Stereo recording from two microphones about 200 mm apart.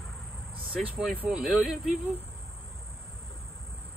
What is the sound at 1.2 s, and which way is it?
Speech, 5° right (ahead or behind).